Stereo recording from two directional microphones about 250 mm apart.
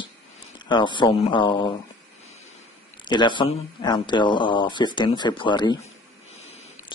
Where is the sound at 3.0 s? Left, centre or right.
Centre.